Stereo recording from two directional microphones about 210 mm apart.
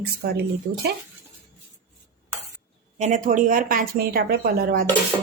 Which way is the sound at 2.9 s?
35° right (ahead or behind).